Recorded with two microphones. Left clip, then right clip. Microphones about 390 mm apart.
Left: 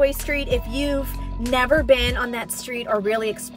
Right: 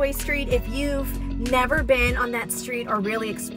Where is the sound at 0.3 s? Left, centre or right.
Centre.